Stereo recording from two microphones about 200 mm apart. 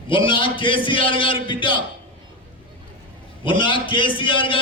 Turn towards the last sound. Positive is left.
turn(degrees=25)  # may be behind; listen again after turning